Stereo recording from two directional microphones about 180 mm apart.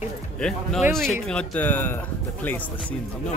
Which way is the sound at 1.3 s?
5° left (ahead or behind).